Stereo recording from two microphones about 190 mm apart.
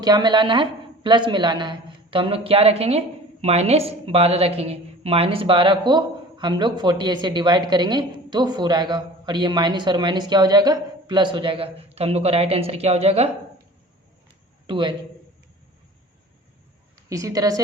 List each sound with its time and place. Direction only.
0.0 s a woman's voice: 20° right (ahead or behind)
14.7 s a woman's voice: 25° right (ahead or behind)
16.9 s a woman's voice: 15° right (ahead or behind)